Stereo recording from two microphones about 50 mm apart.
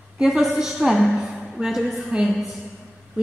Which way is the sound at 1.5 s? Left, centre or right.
Centre.